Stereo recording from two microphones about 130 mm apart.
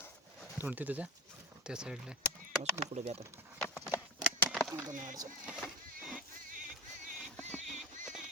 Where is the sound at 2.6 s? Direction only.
55° right (ahead or behind).